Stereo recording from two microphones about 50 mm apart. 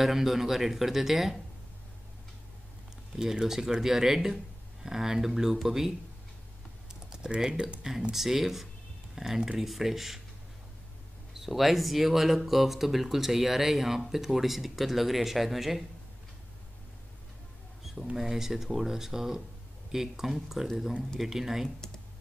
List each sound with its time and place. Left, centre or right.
0.0 s speech: centre
3.2 s speech: centre
6.9 s typing: centre
8.1 s speech: centre
11.3 s speech: centre
18.1 s speech: centre
21.6 s speech: centre